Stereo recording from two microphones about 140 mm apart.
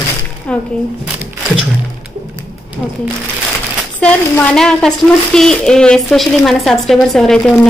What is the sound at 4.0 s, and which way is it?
A man's voice, 10° left (ahead or behind).